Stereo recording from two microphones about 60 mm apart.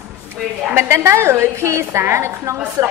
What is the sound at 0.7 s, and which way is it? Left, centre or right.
A woman's voice, right.